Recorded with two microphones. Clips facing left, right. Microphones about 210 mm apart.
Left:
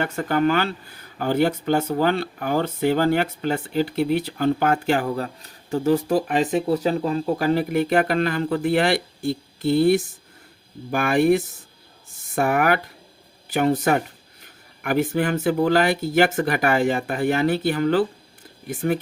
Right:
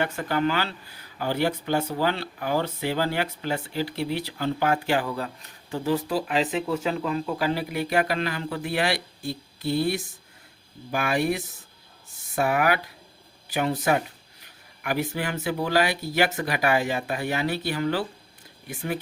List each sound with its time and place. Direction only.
0.0 s speech: 50° left (ahead or behind)